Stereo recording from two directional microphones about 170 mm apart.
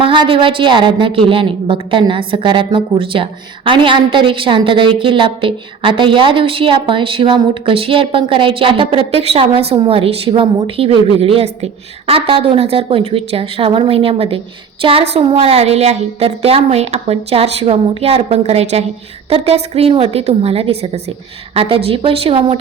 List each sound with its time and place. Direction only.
0.0 s a woman's voice: 30° right (ahead or behind)